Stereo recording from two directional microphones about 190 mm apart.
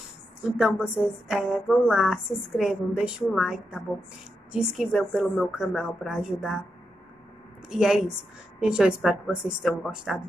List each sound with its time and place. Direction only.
0.6 s a woman's voice: 5° right (ahead or behind)
7.7 s a woman's voice: 5° right (ahead or behind)